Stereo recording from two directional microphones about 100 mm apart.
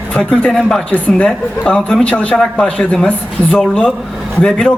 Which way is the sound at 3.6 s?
5° right (ahead or behind).